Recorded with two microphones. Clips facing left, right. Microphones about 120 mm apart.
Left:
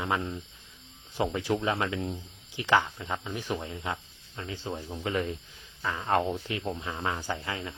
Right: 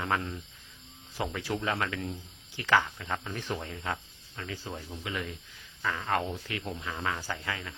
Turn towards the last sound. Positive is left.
turn(degrees=20)  # may be behind; listen again after turning